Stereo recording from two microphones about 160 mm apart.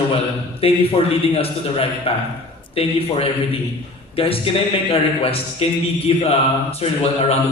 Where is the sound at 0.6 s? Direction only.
35° left (ahead or behind).